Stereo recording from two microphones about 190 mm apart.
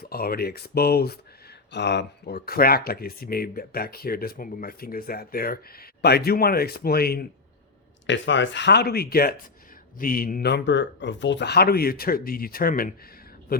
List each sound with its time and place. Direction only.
0.0 s speech: 50° left (ahead or behind)
8.0 s speech: 75° left (ahead or behind); by 12.9 s 50° left (ahead or behind)